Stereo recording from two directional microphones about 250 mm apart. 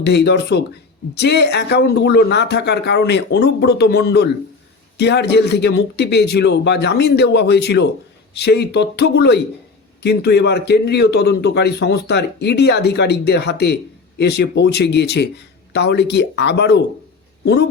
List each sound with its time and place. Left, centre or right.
0.0 s a man's voice: left